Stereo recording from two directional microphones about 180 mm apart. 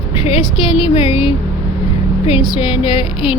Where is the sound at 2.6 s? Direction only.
25° left (ahead or behind).